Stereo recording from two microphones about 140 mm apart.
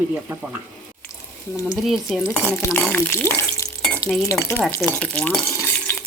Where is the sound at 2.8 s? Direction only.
10° left (ahead or behind).